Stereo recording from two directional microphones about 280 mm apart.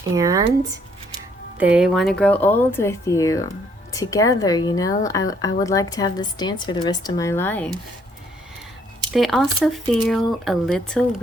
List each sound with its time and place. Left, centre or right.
0.1 s speech: centre
1.5 s speech: centre
9.1 s speech: centre